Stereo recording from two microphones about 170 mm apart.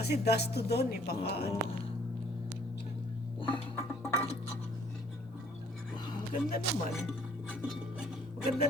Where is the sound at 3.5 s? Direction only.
20° right (ahead or behind).